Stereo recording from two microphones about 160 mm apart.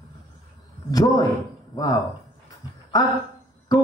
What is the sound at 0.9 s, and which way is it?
Speech, 20° left (ahead or behind).